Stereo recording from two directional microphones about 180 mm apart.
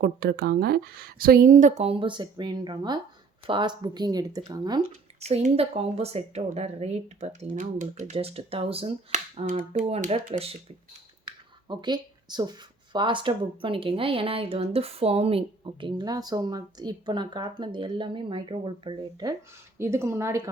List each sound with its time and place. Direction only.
0.0 s a woman's voice: 60° right (ahead or behind); by 4.8 s 25° right (ahead or behind)
5.2 s speech: 35° right (ahead or behind)
9.5 s a woman's voice: 45° right (ahead or behind)
10.3 s speech: 35° right (ahead or behind); by 20.5 s 15° right (ahead or behind)